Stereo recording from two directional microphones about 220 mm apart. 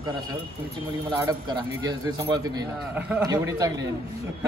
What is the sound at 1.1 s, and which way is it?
Speech, 20° right (ahead or behind).